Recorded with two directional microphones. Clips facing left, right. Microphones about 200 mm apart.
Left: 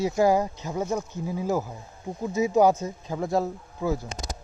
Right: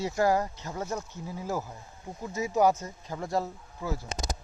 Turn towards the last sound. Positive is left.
turn(degrees=15)  # may be behind; listen again after turning